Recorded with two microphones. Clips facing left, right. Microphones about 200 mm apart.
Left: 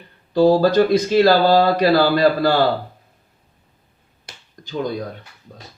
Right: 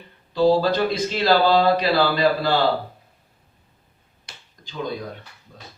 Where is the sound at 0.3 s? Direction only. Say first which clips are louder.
Left 4 dB; 45° left (ahead or behind).